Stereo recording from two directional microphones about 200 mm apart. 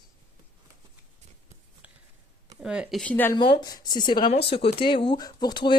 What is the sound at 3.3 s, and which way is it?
Speech, 25° left (ahead or behind).